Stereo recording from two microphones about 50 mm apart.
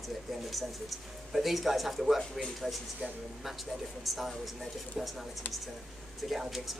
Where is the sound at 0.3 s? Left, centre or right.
Centre.